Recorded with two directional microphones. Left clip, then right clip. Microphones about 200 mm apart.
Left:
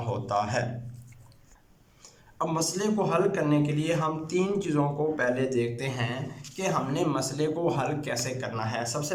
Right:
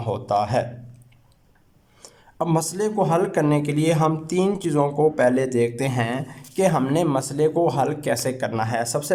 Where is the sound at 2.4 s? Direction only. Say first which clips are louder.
Right 5 dB; 35° right (ahead or behind).